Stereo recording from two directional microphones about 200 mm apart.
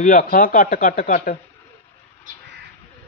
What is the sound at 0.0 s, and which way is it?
Speech, 40° left (ahead or behind).